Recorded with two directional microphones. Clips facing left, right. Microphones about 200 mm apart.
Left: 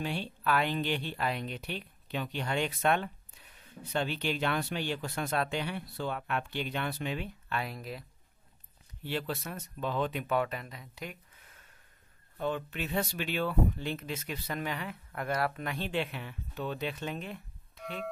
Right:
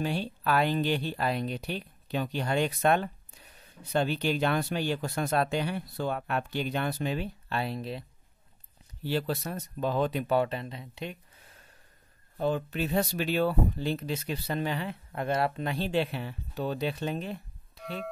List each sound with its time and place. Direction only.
0.0 s speech: 40° right (ahead or behind)
9.0 s speech: 35° right (ahead or behind)
12.4 s speech: 35° right (ahead or behind)